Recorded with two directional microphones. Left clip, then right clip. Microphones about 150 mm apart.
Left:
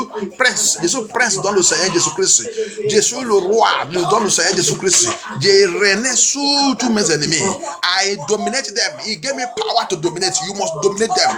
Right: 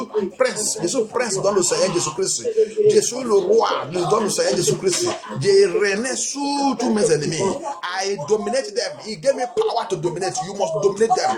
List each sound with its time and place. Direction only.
0.3 s a man's voice: 30° left (ahead or behind)